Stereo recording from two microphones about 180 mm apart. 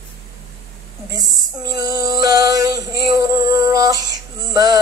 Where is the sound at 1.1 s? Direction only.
20° right (ahead or behind).